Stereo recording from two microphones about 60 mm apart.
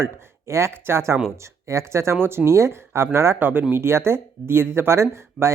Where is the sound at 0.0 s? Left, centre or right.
Right.